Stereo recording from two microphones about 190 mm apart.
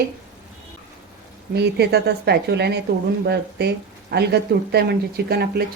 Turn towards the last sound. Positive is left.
turn(degrees=-55)  # may be behind; listen again after turning